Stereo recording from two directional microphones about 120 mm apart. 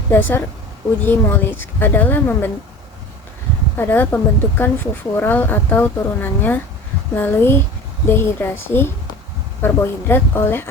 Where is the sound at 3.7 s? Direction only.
15° left (ahead or behind).